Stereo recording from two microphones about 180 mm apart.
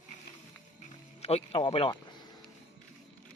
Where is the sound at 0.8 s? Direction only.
35° left (ahead or behind).